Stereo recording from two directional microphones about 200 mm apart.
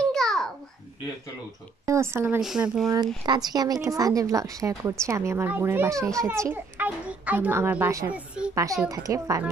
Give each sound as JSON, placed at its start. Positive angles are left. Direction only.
{"t": 0.1, "sound": "babbling", "side_deg": 0}
{"t": 1.9, "sound": "a woman's voice", "side_deg": -15}
{"t": 3.3, "sound": "a woman's voice", "side_deg": -20}